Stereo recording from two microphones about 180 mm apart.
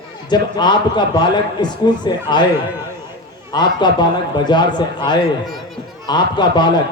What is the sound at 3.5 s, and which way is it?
A man's voice, 25° left (ahead or behind).